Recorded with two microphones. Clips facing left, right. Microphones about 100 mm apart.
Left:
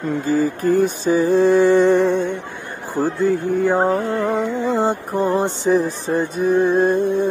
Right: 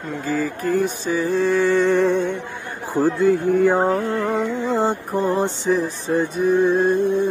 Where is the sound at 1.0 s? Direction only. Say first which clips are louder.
Left 5 dB; 25° left (ahead or behind).